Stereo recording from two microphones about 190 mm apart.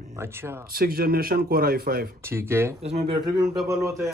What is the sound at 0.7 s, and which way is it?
A man's voice, 50° right (ahead or behind).